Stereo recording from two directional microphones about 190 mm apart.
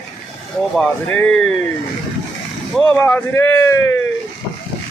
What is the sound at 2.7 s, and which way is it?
A man's voice, 10° left (ahead or behind).